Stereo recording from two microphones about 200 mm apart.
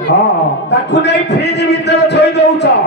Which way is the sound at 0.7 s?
60° left (ahead or behind).